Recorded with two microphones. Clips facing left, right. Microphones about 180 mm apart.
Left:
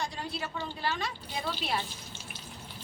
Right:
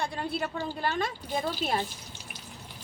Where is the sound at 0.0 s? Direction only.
55° right (ahead or behind).